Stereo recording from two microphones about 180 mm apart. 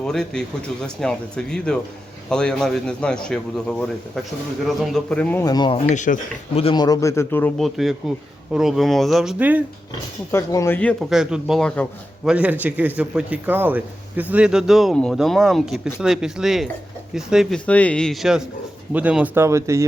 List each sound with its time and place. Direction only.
0.0 s a man's voice: 5° left (ahead or behind); by 5.8 s 25° left (ahead or behind)
5.9 s speech: 45° left (ahead or behind)
6.6 s speech: 30° left (ahead or behind)
6.8 s a man's voice: 20° left (ahead or behind)
7.6 s speech: centre (ahead or behind)
10.3 s speech: 15° left (ahead or behind); by 19.8 s 15° right (ahead or behind)